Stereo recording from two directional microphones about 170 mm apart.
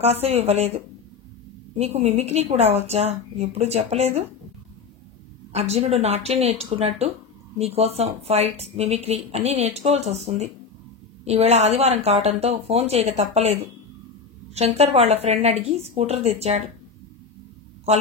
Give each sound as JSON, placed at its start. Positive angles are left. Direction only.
{"t": 0.0, "sound": "speech", "side_deg": -40}
{"t": 5.5, "sound": "speech", "side_deg": -40}